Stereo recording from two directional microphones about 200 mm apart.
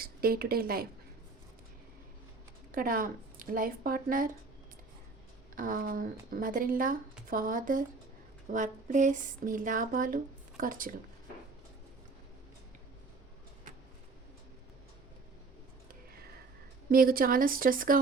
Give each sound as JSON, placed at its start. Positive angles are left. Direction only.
{"t": 0.0, "sound": "speech", "side_deg": -50}
{"t": 2.7, "sound": "speech", "side_deg": -45}
{"t": 5.5, "sound": "speech", "side_deg": -45}
{"t": 8.4, "sound": "a sound", "side_deg": -40}
{"t": 10.6, "sound": "speech", "side_deg": -45}
{"t": 16.9, "sound": "speech", "side_deg": -45}